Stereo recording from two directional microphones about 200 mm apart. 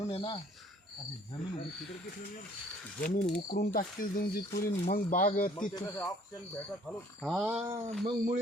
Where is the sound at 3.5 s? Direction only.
45° left (ahead or behind).